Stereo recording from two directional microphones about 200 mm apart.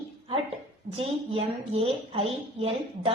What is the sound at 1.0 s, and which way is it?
A woman's voice, 30° right (ahead or behind).